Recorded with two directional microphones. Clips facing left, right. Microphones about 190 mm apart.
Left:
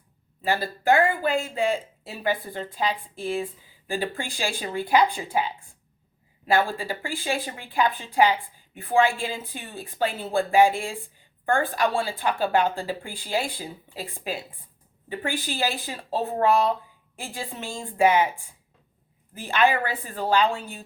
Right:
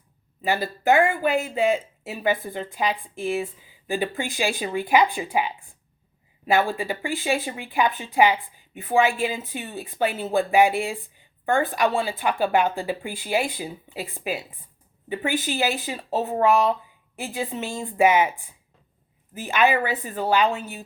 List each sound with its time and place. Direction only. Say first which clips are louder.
0.4 s a woman's voice: right 1 dB; 15° right (ahead or behind)
15.1 s a woman's voice: right 4 dB; 15° right (ahead or behind)
17.2 s a woman's voice: right 5 dB; 15° right (ahead or behind)
19.3 s a woman's voice: right 1 dB; 15° right (ahead or behind)